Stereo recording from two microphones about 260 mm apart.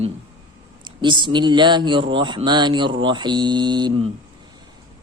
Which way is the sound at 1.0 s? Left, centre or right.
Centre.